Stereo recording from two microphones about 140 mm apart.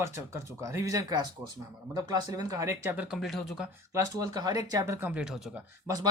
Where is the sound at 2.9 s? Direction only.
Centre (ahead or behind).